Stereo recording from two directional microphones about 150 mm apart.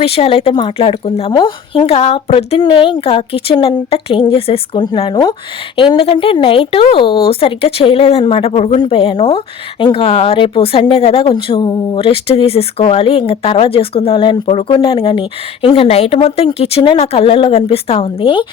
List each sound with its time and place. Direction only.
0.0 s speech: 40° left (ahead or behind)
1.3 s speech: 30° left (ahead or behind)